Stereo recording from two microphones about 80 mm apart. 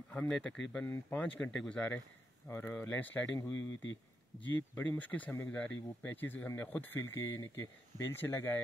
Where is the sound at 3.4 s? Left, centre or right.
Left.